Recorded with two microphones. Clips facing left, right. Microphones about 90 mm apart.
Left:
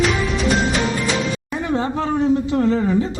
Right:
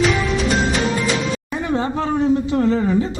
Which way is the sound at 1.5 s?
15° right (ahead or behind).